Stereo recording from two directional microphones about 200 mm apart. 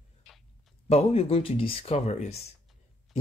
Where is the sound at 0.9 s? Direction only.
30° left (ahead or behind).